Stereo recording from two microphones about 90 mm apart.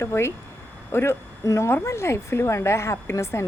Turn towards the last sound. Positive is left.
turn(degrees=30)  # may be behind; listen again after turning